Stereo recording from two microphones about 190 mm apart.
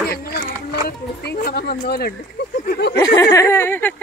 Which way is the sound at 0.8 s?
55° left (ahead or behind).